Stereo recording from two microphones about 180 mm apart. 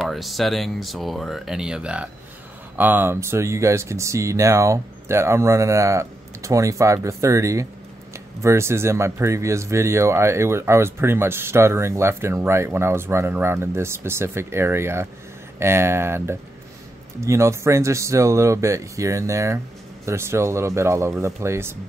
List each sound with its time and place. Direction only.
0.0 s speech: centre (ahead or behind)